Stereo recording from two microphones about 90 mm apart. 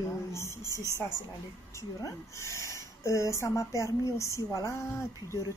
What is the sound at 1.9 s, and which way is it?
Speech, 35° left (ahead or behind).